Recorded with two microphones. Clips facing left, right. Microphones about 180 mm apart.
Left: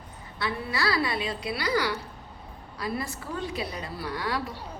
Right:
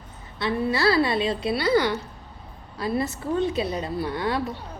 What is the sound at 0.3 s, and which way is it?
A woman's voice, 25° right (ahead or behind).